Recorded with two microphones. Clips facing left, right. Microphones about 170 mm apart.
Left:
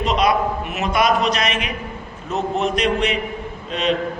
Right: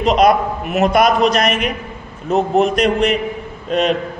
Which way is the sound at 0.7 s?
50° right (ahead or behind).